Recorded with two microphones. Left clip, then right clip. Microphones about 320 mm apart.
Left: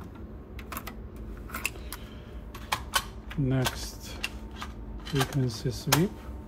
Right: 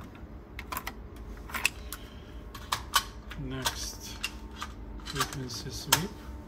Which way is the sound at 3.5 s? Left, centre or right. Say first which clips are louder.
Left 1 dB; centre.